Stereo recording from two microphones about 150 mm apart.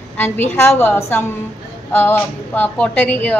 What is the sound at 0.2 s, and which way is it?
A woman's voice, 15° left (ahead or behind).